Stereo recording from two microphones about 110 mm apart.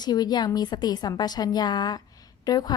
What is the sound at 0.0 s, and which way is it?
A woman's voice, 40° left (ahead or behind).